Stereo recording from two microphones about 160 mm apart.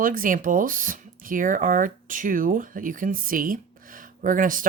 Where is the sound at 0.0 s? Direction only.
60° right (ahead or behind).